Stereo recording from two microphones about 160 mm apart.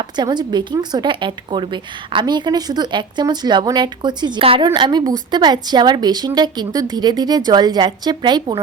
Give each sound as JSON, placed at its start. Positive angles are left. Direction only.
{"t": 0.0, "sound": "a woman's voice", "side_deg": -25}